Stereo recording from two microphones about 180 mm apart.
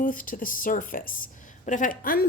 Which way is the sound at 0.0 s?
50° left (ahead or behind).